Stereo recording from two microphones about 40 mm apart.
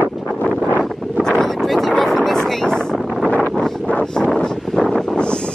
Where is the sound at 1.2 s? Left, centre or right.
Centre.